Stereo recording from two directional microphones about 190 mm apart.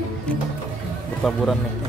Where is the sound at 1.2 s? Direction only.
Centre (ahead or behind).